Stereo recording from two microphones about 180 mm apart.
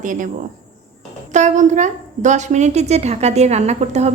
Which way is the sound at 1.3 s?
40° right (ahead or behind).